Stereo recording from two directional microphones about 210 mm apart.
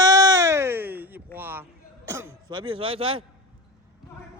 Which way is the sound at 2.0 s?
10° right (ahead or behind).